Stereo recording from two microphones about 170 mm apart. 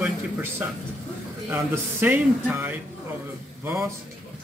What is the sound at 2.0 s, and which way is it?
A man's voice, 10° right (ahead or behind).